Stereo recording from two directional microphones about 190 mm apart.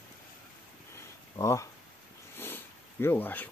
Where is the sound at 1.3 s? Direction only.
15° left (ahead or behind).